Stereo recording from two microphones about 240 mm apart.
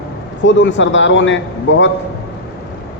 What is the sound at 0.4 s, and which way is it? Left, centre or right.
A man's voice, left.